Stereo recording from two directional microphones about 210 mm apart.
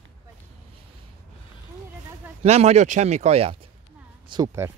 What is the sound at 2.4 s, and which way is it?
Speech, 30° right (ahead or behind).